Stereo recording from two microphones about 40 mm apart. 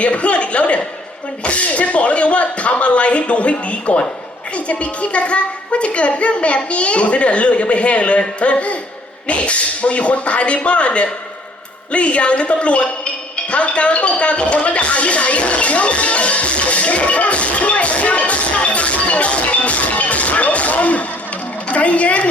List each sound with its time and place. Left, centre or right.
0.0 s a woman's voice: left
13.5 s music: left
21.7 s a woman's voice: left